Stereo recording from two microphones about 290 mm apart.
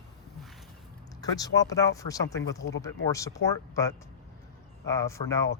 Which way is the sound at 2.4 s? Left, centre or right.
Left.